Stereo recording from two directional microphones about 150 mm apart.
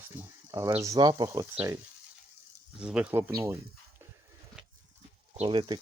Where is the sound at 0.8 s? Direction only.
25° right (ahead or behind).